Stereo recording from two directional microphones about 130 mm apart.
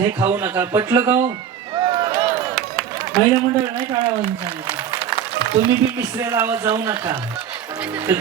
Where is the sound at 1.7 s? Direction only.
35° right (ahead or behind).